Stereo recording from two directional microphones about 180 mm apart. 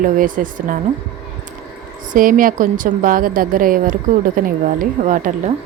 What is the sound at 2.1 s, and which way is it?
Speech, 50° right (ahead or behind).